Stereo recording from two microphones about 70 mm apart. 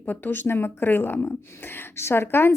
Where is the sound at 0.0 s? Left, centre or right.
Left.